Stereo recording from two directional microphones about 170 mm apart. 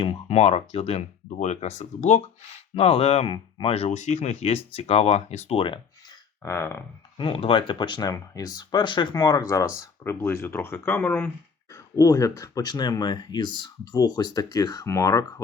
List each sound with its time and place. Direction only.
0.0 s speech: 35° left (ahead or behind)
2.7 s speech: 35° left (ahead or behind)
6.4 s speech: 15° left (ahead or behind)
7.2 s speech: 30° left (ahead or behind)